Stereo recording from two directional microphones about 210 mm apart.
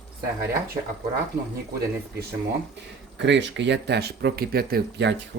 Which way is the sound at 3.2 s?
55° right (ahead or behind).